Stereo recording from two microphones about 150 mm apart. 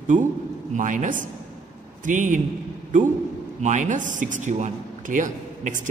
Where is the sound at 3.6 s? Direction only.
55° right (ahead or behind).